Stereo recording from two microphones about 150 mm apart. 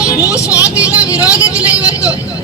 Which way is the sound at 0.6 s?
10° right (ahead or behind).